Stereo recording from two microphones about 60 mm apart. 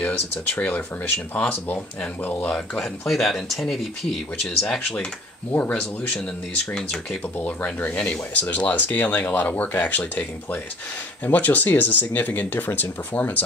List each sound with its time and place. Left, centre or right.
0.6 s speech: left
2.8 s speech: centre
5.5 s speech: left
6.7 s speech: centre
7.3 s speech: left